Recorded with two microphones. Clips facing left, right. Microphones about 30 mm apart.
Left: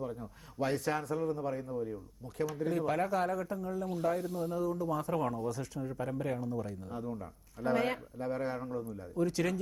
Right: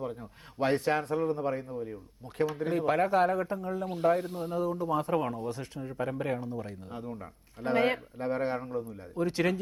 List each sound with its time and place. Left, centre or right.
0.0 s speech: right